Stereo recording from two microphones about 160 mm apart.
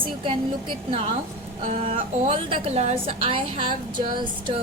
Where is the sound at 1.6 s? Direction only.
45° right (ahead or behind).